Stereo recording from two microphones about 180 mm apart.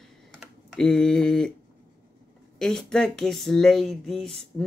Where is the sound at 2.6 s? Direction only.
5° left (ahead or behind).